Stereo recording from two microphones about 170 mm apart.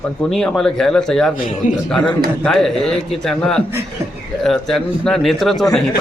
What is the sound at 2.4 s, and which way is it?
Speech, 5° left (ahead or behind).